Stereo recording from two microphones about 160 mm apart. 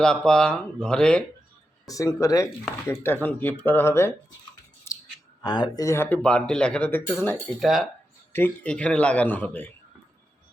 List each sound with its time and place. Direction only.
0.0 s speech: 5° left (ahead or behind)
1.9 s speech: 20° left (ahead or behind)
4.9 s clicking: 15° left (ahead or behind)
5.4 s speech: 25° left (ahead or behind); by 7.9 s centre (ahead or behind)
8.3 s speech: 15° left (ahead or behind)